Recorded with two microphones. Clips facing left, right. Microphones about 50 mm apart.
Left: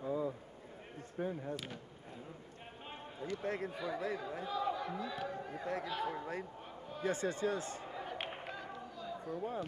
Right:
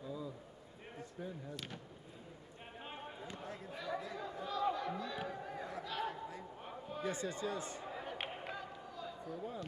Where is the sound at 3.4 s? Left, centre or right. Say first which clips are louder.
Left 9 dB; left.